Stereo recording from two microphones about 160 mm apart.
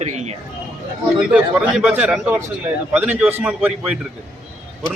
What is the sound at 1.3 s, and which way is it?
A man's voice, 5° right (ahead or behind).